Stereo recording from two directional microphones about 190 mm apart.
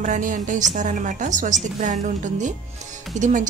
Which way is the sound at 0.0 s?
40° right (ahead or behind).